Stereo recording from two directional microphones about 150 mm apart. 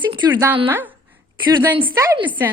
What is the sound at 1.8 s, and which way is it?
Speech, 35° right (ahead or behind).